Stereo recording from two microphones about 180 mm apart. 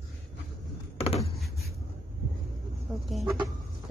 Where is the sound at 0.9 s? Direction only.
35° left (ahead or behind).